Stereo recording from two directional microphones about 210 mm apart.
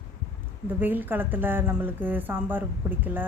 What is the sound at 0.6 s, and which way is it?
Speech, 10° right (ahead or behind).